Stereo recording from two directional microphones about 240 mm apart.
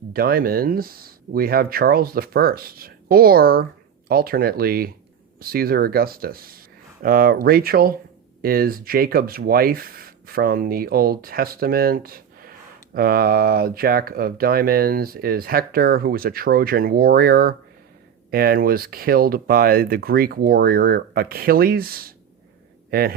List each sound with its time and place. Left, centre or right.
0.1 s a man's voice: right